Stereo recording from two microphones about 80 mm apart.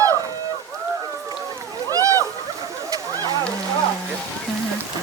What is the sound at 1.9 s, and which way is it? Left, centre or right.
Splash, right.